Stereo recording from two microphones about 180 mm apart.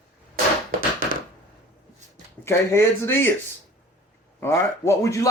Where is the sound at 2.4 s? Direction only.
15° left (ahead or behind).